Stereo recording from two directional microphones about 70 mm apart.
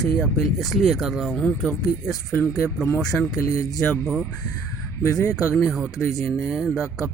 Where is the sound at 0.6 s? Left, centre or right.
Centre.